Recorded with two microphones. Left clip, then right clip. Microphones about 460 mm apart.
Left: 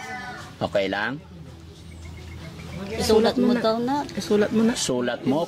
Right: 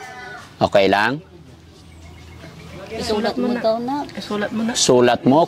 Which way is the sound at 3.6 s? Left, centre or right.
Left.